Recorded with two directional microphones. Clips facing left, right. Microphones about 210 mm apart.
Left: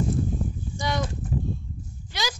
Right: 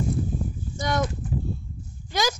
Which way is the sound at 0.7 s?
50° right (ahead or behind).